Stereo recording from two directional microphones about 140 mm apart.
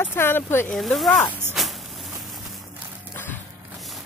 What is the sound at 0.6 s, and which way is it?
Speech, centre (ahead or behind).